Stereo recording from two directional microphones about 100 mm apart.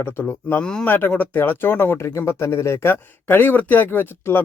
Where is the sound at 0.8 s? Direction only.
20° left (ahead or behind).